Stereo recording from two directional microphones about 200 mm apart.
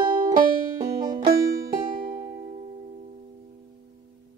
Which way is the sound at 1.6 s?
45° right (ahead or behind).